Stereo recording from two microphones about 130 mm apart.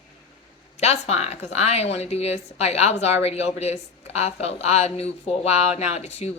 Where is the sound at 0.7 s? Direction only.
60° left (ahead or behind).